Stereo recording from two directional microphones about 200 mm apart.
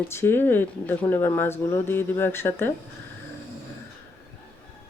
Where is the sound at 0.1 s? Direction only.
10° left (ahead or behind).